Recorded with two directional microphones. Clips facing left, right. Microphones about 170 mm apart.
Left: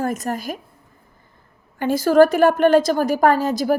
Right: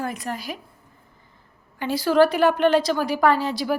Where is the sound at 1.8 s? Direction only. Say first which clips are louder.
Left 4 dB; 45° left (ahead or behind).